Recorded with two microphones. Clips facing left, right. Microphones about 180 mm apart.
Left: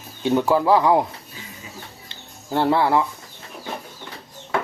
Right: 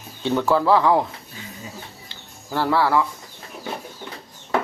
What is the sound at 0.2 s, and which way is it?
Speech, 15° left (ahead or behind).